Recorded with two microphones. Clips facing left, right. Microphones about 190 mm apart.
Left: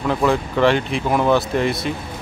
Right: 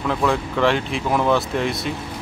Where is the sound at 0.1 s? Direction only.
Centre (ahead or behind).